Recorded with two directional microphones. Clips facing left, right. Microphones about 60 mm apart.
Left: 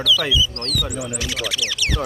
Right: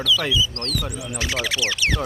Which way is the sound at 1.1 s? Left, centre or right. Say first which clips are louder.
Right 1 dB; right.